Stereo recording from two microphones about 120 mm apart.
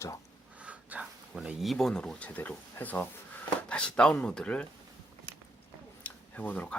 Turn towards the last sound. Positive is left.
turn(degrees=10)  # may be behind; listen again after turning